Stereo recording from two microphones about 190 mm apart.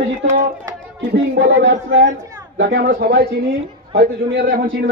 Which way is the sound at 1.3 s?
70° right (ahead or behind).